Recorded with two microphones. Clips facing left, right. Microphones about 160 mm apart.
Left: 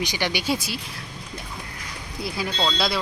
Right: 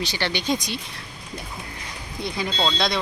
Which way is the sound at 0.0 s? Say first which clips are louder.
Even; 15° left (ahead or behind).